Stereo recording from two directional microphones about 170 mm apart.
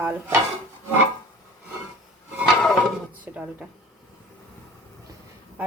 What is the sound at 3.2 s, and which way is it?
Speech, 10° right (ahead or behind).